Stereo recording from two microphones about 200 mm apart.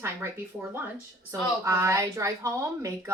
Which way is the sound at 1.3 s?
15° right (ahead or behind).